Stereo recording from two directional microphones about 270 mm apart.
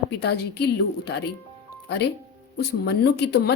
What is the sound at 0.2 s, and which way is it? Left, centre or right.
A woman's voice, left.